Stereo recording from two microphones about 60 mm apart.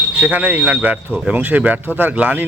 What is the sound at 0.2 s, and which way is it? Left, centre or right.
Speech, right.